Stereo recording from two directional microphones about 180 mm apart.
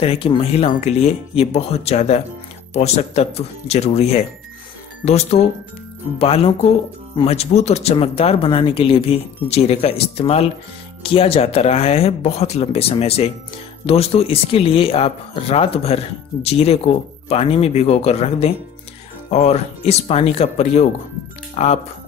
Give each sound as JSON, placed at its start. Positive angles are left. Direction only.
{"t": 0.0, "sound": "speech", "side_deg": 30}